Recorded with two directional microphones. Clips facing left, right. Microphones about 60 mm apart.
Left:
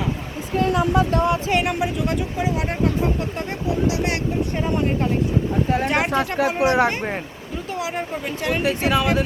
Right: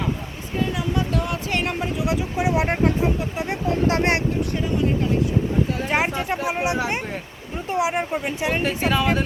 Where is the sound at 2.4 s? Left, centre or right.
Right.